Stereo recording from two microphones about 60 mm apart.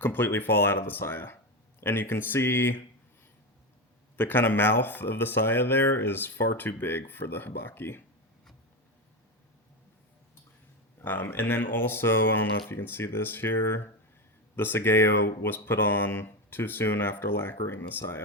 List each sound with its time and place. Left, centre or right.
0.0 s speech: left
4.2 s speech: left
6.3 s speech: left
6.6 s speech: left
11.0 s speech: left